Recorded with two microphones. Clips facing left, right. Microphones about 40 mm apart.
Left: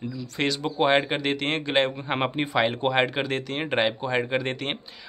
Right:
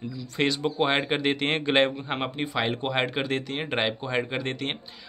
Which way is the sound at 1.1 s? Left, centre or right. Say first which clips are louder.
Right 1 dB; centre.